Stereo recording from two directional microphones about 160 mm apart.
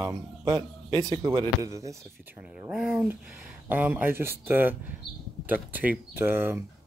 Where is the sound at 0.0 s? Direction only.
25° right (ahead or behind).